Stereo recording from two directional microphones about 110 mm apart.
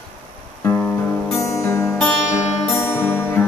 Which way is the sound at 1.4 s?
25° left (ahead or behind).